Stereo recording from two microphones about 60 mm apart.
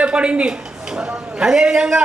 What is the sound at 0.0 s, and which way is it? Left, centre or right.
Speech, centre.